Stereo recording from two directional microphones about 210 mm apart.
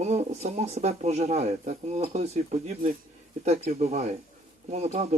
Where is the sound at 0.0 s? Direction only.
30° right (ahead or behind).